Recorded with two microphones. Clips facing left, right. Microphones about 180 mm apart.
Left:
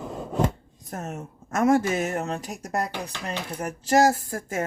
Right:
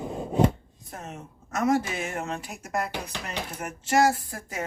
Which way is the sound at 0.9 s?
45° left (ahead or behind).